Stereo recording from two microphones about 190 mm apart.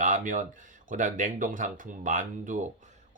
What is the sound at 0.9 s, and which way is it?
Speech, 40° right (ahead or behind).